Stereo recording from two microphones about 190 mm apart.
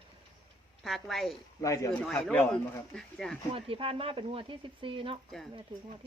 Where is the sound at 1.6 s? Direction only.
15° left (ahead or behind).